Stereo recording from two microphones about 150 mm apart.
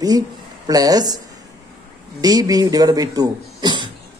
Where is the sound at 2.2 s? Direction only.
25° right (ahead or behind).